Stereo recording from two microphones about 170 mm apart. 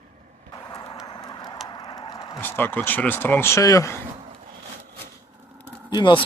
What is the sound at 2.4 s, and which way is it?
Speech, 10° left (ahead or behind).